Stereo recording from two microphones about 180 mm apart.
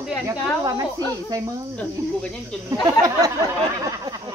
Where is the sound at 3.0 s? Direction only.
20° right (ahead or behind).